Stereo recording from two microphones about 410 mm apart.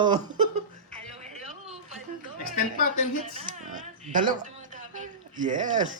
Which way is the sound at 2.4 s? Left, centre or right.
Centre.